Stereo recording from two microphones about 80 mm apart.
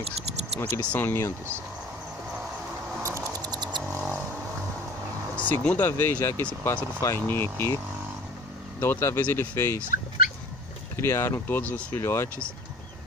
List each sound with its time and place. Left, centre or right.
0.6 s speech: left
3.0 s a sound: right
5.3 s speech: centre
8.7 s speech: left
11.0 s speech: left